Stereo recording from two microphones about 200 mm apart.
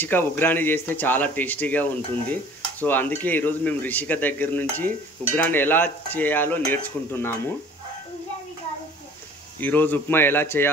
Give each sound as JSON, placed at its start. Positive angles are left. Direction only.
{"t": 0.0, "sound": "speech", "side_deg": 10}
{"t": 9.6, "sound": "speech", "side_deg": 10}